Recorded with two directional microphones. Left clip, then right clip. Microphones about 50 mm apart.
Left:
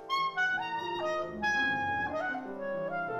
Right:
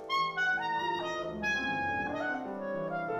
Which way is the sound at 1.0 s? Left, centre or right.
Centre.